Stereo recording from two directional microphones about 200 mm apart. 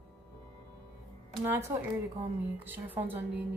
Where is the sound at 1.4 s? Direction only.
10° right (ahead or behind).